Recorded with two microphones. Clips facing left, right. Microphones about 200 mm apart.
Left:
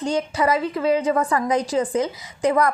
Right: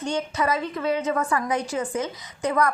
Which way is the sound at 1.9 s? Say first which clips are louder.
Left 5 dB; 10° left (ahead or behind).